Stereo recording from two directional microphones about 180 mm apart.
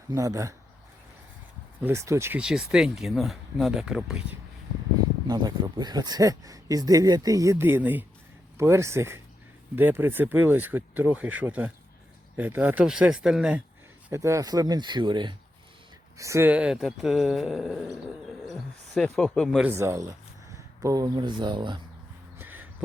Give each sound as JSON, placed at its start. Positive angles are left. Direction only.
{"t": 0.1, "sound": "speech", "side_deg": -15}
{"t": 1.8, "sound": "speech", "side_deg": -15}
{"t": 5.3, "sound": "speech", "side_deg": -20}
{"t": 14.1, "sound": "speech", "side_deg": -15}
{"t": 19.7, "sound": "speech", "side_deg": -15}
{"t": 22.4, "sound": "a sound", "side_deg": -10}